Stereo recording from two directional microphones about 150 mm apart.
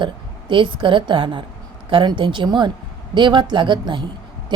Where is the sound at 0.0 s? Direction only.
35° right (ahead or behind).